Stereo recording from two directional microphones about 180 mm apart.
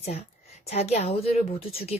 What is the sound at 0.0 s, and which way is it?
A woman's voice, 35° left (ahead or behind).